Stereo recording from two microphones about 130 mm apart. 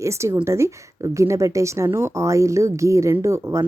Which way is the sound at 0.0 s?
20° right (ahead or behind).